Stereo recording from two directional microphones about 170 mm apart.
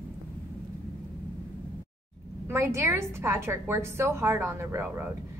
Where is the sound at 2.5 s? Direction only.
15° right (ahead or behind).